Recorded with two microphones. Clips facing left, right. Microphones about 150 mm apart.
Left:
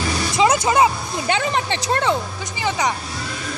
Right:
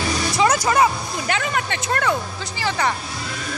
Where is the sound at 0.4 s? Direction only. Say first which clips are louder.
Left 2 dB; 20° left (ahead or behind).